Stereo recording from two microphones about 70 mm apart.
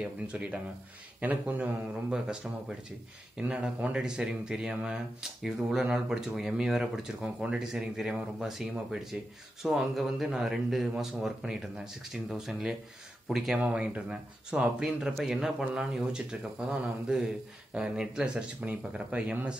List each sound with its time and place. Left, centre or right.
0.0 s speech: centre
13.6 s speech: centre